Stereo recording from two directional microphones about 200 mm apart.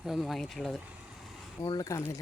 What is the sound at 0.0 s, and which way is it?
Speech, centre (ahead or behind).